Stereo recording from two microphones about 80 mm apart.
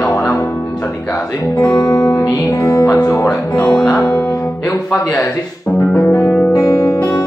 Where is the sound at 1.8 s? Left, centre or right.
Left.